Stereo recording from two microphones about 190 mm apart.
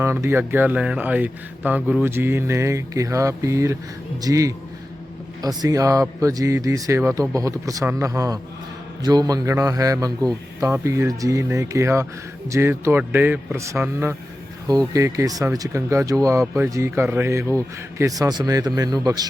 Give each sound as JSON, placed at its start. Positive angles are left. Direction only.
{"t": 0.0, "sound": "a man's voice", "side_deg": -15}